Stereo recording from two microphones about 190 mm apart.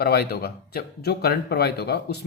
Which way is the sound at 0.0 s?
55° left (ahead or behind).